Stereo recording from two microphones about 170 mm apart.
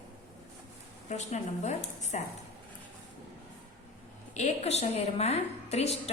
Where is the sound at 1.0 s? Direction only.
45° left (ahead or behind).